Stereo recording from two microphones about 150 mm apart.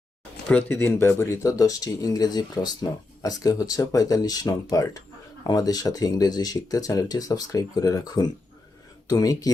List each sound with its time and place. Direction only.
0.4 s speech: 15° left (ahead or behind)